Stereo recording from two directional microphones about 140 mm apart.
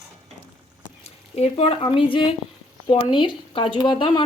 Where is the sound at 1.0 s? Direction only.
45° left (ahead or behind).